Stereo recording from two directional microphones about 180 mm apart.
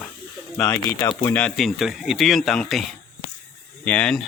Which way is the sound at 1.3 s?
5° left (ahead or behind).